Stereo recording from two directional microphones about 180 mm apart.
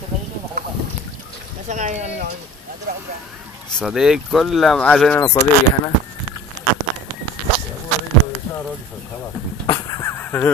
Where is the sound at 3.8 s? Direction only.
Centre (ahead or behind).